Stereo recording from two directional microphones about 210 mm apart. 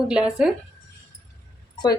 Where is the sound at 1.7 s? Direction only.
20° left (ahead or behind).